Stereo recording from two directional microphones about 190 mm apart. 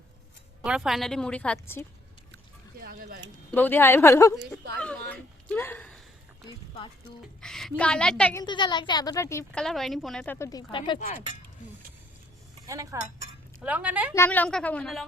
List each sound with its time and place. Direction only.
0.6 s a woman's voice: 5° right (ahead or behind)
2.8 s speech: 50° right (ahead or behind)
3.5 s a woman's voice: 10° left (ahead or behind)
4.4 s speech: 60° right (ahead or behind)
5.5 s a sound: 10° left (ahead or behind)
7.4 s a woman's voice: centre (ahead or behind)
8.4 s a woman's voice: 25° left (ahead or behind)
9.5 s a woman's voice: 5° left (ahead or behind)
10.7 s a woman's voice: 25° left (ahead or behind)
12.6 s speech: 20° right (ahead or behind)
13.6 s speech: 5° right (ahead or behind)
14.2 s a woman's voice: 10° left (ahead or behind)